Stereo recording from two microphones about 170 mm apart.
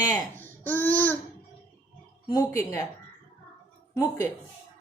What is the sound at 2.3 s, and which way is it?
Speech, 20° left (ahead or behind).